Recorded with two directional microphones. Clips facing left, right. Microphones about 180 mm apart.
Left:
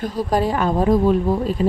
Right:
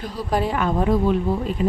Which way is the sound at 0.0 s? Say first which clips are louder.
Left 3 dB; 40° left (ahead or behind).